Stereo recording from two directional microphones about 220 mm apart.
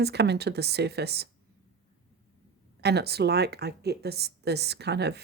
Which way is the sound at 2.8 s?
45° right (ahead or behind).